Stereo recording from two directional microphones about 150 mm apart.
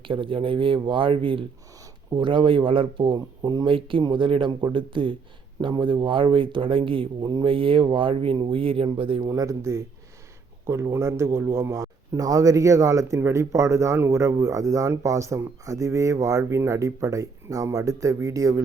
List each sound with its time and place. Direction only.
0.0 s speech: 35° right (ahead or behind)
9.2 s a man's voice: 20° right (ahead or behind)